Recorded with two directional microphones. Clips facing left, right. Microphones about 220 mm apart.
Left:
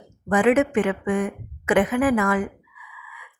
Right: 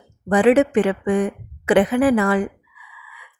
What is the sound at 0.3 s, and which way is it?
A woman's voice, 35° right (ahead or behind).